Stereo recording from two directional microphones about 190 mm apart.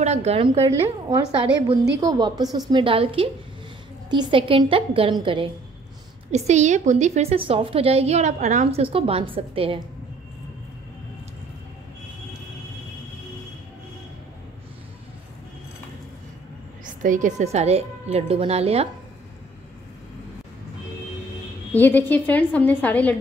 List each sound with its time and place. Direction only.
0.0 s a woman's voice: 35° right (ahead or behind)
0.7 s a woman's voice: 15° right (ahead or behind)
16.8 s a woman's voice: 45° right (ahead or behind)
21.7 s a woman's voice: 10° left (ahead or behind)